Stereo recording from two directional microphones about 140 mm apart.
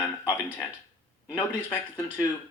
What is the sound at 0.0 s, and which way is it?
Music, 15° left (ahead or behind).